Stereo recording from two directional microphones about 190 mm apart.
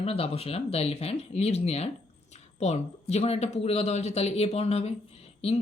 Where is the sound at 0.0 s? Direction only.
30° left (ahead or behind).